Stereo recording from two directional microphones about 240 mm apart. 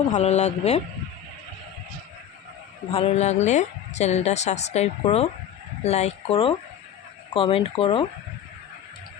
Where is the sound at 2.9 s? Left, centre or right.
Left.